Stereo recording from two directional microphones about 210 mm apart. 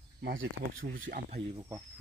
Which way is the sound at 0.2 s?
60° right (ahead or behind).